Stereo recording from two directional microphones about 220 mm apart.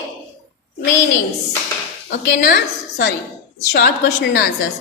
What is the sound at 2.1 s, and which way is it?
A woman's voice, 45° left (ahead or behind).